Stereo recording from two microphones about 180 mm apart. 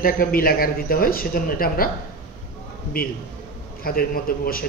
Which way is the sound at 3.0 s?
55° left (ahead or behind).